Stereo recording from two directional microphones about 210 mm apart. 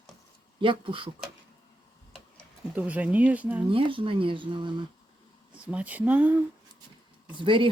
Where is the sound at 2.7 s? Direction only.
5° right (ahead or behind).